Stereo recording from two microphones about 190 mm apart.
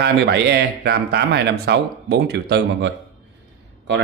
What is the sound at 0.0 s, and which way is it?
Speech, 60° right (ahead or behind).